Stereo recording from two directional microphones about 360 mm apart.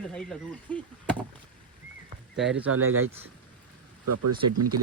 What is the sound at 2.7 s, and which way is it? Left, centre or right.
Speech, right.